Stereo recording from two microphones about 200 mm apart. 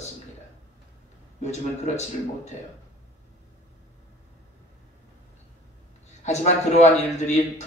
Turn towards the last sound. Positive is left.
turn(degrees=35)  # may be behind; listen again after turning